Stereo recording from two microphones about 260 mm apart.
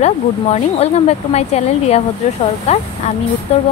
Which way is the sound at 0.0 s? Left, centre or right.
Left.